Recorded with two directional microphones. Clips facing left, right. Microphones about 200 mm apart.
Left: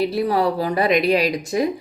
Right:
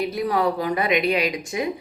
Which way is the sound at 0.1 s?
30° left (ahead or behind).